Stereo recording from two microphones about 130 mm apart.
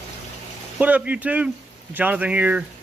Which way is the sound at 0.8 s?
10° right (ahead or behind).